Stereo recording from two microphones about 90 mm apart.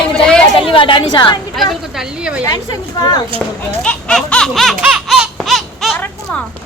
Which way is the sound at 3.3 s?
15° left (ahead or behind).